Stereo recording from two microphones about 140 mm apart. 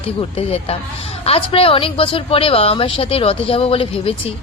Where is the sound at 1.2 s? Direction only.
40° left (ahead or behind).